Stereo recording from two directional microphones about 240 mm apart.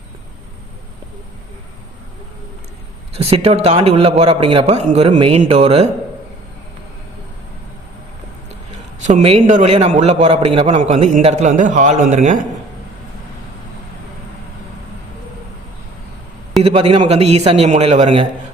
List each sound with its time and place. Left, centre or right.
3.2 s a man's voice: right
9.0 s a man's voice: right
16.6 s a man's voice: right